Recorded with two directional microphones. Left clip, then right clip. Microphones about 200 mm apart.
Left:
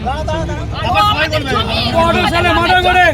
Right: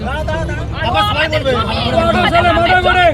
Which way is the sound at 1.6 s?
5° left (ahead or behind).